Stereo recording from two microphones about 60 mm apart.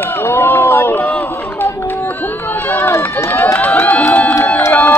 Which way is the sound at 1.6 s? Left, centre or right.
Left.